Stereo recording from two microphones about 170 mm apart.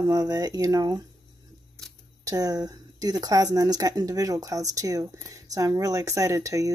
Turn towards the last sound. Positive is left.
turn(degrees=-20)  # may be behind; listen again after turning